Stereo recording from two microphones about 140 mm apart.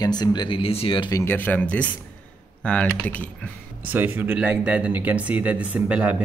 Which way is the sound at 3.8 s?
15° right (ahead or behind).